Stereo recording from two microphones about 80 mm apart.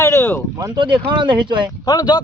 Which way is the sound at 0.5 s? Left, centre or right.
Right.